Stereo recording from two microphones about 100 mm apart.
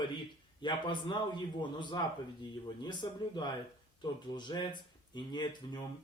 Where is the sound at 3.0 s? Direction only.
45° left (ahead or behind).